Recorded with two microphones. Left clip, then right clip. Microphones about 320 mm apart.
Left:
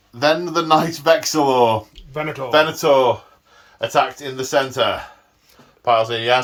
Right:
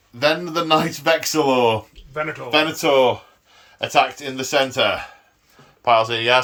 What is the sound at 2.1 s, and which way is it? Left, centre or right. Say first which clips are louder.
Speech: even; left.